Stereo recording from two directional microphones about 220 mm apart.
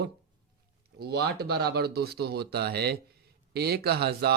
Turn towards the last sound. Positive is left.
turn(degrees=-45)  # may be behind; listen again after turning